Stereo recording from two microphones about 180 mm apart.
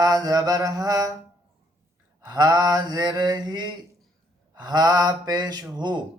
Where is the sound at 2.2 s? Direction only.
20° right (ahead or behind).